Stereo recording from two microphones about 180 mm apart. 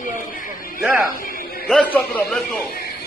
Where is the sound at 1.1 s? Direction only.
50° left (ahead or behind).